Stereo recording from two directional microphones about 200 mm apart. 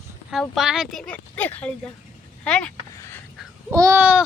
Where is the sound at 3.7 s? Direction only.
15° right (ahead or behind).